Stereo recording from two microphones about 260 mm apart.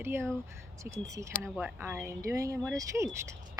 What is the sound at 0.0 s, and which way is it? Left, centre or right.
A woman's voice, centre.